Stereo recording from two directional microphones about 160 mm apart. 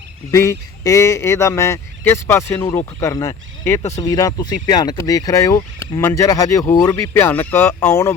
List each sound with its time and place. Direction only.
0.3 s speech: 20° left (ahead or behind)